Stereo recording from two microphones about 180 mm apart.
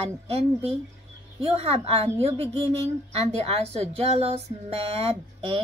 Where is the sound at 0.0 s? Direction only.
35° right (ahead or behind).